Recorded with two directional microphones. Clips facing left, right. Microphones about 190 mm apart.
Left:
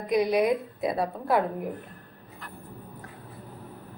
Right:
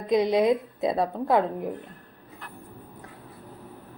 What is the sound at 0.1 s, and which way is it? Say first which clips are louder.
A woman's voice: right 2 dB; 25° right (ahead or behind).